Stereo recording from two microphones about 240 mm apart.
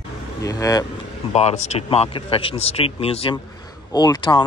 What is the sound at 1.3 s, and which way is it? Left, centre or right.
Speech, left.